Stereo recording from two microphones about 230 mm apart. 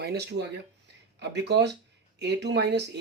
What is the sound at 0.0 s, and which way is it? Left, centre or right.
Speech, right.